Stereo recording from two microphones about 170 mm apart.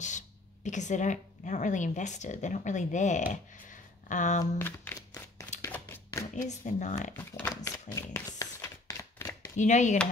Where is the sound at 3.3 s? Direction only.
50° left (ahead or behind).